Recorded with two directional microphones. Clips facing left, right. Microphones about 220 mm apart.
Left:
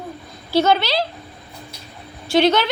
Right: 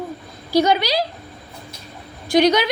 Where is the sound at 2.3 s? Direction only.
15° right (ahead or behind).